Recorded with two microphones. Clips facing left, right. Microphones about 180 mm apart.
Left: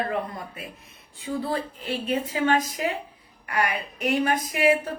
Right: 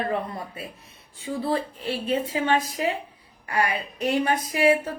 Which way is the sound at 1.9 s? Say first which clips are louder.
Right 1 dB; 30° right (ahead or behind).